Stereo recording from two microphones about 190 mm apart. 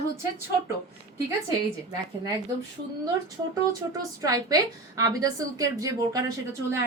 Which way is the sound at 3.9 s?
20° right (ahead or behind).